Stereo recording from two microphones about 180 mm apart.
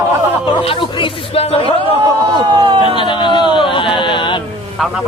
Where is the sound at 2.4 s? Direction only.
25° right (ahead or behind).